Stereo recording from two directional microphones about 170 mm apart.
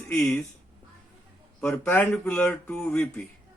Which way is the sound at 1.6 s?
10° left (ahead or behind).